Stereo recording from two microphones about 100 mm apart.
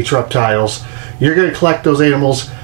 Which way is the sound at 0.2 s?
20° right (ahead or behind).